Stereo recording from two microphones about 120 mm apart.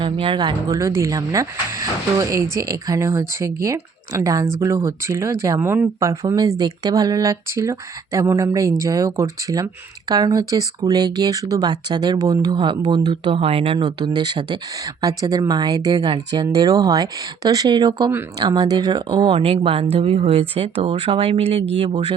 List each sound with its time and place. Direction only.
0.0 s speech: 45° right (ahead or behind)
0.8 s speech: 25° right (ahead or behind)
13.3 s speech: 55° right (ahead or behind)
16.3 s speech: 30° right (ahead or behind); by 21.9 s 50° right (ahead or behind)